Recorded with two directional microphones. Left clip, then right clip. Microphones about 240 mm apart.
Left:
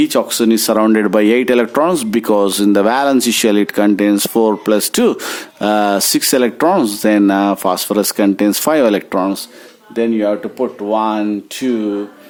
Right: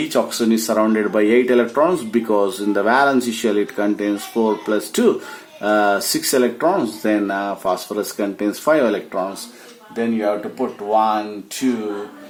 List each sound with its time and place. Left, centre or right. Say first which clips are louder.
0.1 s speech: left 4 dB; left